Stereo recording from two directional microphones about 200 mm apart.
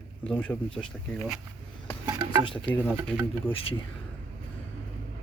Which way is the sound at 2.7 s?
10° left (ahead or behind).